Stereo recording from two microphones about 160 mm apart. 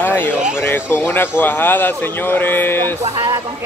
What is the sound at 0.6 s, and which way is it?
Speech, 15° left (ahead or behind).